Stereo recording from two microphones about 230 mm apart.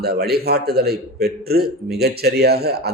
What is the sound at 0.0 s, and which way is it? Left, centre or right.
A man's voice, right.